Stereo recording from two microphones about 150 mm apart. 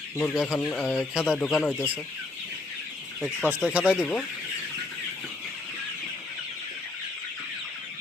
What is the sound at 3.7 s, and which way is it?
Speech, 5° right (ahead or behind).